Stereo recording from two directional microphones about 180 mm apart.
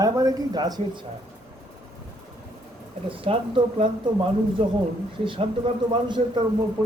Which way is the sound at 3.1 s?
30° right (ahead or behind).